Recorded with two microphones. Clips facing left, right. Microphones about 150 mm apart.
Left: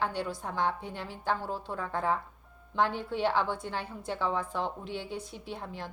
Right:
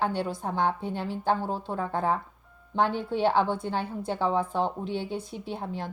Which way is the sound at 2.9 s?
Centre (ahead or behind).